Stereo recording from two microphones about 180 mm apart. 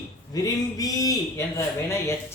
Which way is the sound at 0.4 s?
20° left (ahead or behind).